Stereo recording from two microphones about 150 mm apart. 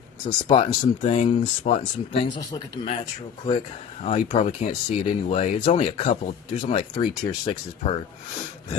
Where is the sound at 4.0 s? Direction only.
50° left (ahead or behind).